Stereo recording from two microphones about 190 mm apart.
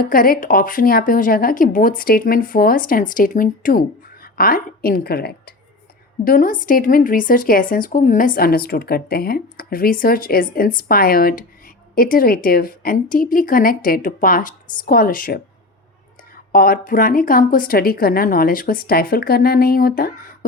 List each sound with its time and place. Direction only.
0.0 s speech: 50° left (ahead or behind)
16.5 s speech: 50° left (ahead or behind)